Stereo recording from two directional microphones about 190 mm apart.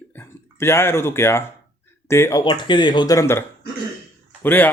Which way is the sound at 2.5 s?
25° left (ahead or behind).